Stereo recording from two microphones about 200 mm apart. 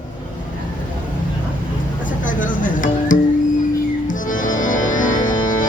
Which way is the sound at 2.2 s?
40° left (ahead or behind).